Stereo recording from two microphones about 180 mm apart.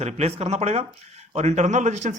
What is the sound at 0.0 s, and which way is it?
Speech, 35° right (ahead or behind).